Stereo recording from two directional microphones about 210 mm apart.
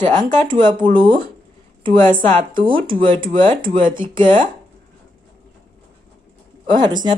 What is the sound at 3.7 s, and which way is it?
Speech, 40° right (ahead or behind).